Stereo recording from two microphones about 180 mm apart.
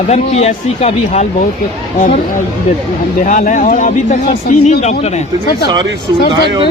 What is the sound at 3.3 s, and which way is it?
Speech, 45° left (ahead or behind).